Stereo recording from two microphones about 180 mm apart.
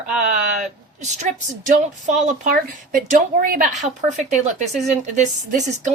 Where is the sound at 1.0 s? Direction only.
40° right (ahead or behind).